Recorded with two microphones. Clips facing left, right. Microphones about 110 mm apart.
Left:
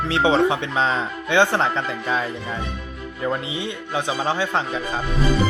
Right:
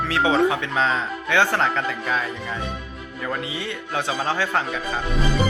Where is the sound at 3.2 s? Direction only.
20° left (ahead or behind).